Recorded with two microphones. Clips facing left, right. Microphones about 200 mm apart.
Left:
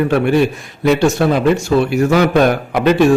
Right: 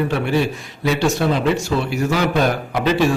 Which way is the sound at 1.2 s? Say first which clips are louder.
Left 5 dB; 60° left (ahead or behind).